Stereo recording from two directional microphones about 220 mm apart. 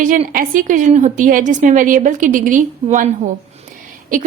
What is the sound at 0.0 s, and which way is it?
A woman's voice, 35° right (ahead or behind).